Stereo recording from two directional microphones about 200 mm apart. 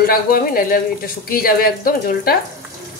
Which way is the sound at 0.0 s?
50° left (ahead or behind).